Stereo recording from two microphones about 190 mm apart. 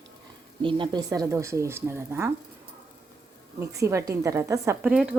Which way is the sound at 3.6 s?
15° right (ahead or behind).